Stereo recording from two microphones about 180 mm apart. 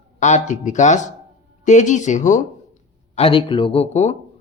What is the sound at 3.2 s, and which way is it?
Speech, 30° left (ahead or behind).